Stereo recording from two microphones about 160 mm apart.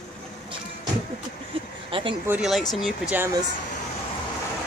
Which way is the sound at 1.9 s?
35° right (ahead or behind).